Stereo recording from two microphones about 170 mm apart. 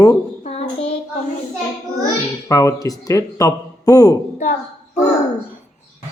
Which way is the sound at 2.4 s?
20° left (ahead or behind).